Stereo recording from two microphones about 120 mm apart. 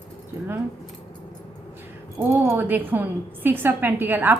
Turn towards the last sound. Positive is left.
turn(degrees=-15)  # may be behind; listen again after turning